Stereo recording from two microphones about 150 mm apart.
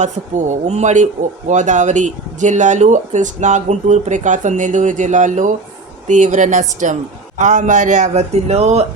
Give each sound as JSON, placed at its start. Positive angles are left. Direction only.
{"t": 0.0, "sound": "speech", "side_deg": -55}